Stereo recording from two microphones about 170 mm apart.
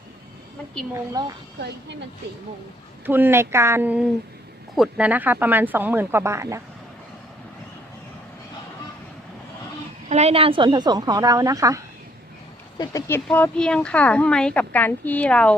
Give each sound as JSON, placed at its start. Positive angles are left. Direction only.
{"t": 1.2, "sound": "a woman's voice", "side_deg": -20}
{"t": 3.1, "sound": "speech", "side_deg": -15}
{"t": 10.1, "sound": "a woman's voice", "side_deg": -40}
{"t": 12.8, "sound": "speech", "side_deg": 20}
{"t": 13.2, "sound": "a woman's voice", "side_deg": 5}